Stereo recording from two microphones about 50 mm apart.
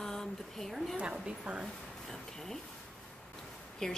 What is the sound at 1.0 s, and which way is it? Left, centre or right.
Speech, right.